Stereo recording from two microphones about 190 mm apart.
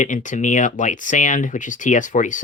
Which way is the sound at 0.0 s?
40° left (ahead or behind).